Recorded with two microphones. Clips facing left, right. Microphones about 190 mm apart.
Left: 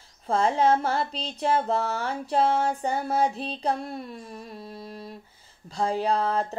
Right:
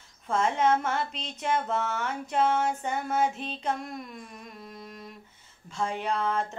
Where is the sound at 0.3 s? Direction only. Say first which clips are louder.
Left 3 dB; 35° left (ahead or behind).